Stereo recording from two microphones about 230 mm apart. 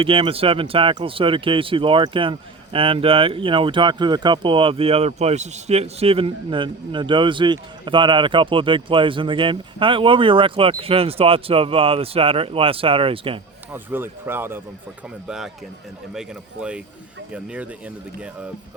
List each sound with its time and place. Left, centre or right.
0.0 s speech: right
13.7 s speech: centre
16.1 s speech: centre